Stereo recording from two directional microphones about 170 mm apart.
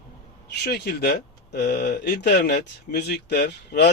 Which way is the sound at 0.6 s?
70° left (ahead or behind).